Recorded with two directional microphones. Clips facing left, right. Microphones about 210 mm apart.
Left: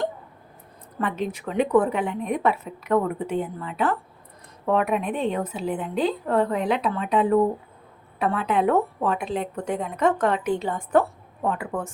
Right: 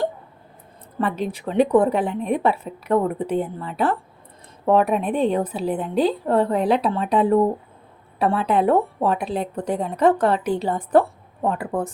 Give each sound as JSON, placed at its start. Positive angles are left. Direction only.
{"t": 0.9, "sound": "a woman's voice", "side_deg": -35}